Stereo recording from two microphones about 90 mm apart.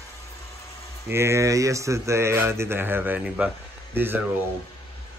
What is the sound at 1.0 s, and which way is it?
Speech, 30° right (ahead or behind).